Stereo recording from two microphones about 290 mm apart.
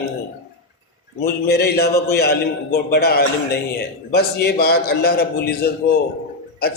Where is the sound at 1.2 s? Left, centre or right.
Left.